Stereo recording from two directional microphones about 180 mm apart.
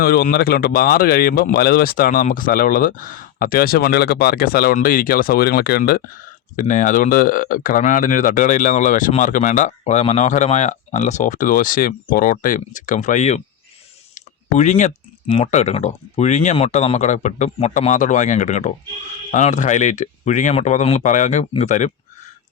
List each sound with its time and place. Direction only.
0.0 s speech: 55° left (ahead or behind)
6.6 s speech: 45° left (ahead or behind)